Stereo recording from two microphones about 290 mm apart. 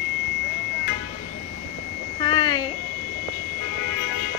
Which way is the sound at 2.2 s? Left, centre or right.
Centre.